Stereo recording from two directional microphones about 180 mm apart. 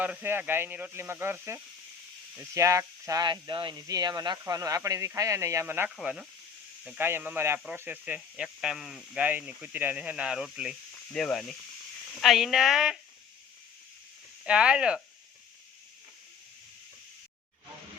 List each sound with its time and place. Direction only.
0.0 s speech: 10° right (ahead or behind)
5.9 s speech: centre (ahead or behind)
14.4 s speech: 5° right (ahead or behind)